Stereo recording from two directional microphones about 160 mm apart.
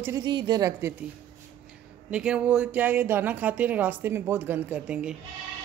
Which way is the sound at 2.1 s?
5° right (ahead or behind).